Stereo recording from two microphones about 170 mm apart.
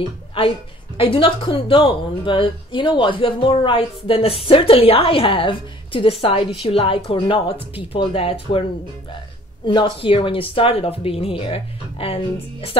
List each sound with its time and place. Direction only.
0.9 s a woman's voice: 30° left (ahead or behind)
9.7 s a woman's voice: 30° left (ahead or behind)